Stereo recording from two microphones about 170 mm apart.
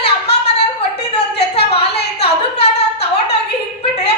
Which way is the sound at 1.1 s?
75° left (ahead or behind).